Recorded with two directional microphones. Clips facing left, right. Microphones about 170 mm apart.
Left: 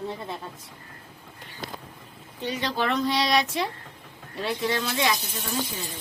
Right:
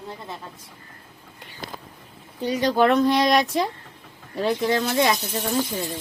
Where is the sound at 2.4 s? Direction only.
40° right (ahead or behind).